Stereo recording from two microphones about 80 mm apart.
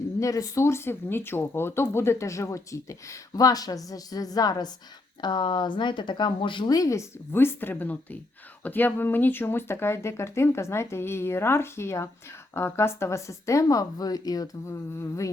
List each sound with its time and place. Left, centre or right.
0.2 s speech: left
5.2 s speech: left
6.7 s speech: left
7.3 s speech: left
14.7 s speech: left